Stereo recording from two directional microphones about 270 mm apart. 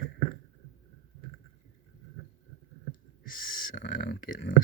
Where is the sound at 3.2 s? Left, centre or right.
Left.